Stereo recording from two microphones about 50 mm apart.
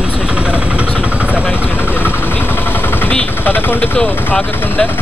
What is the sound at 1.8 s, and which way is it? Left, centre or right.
Vehicle, left.